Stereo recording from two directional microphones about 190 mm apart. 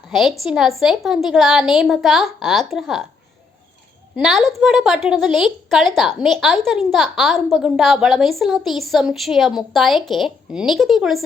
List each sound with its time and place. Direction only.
0.1 s a woman's voice: centre (ahead or behind)
4.2 s a woman's voice: centre (ahead or behind)